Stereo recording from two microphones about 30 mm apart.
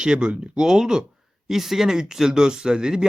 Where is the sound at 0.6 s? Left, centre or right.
Right.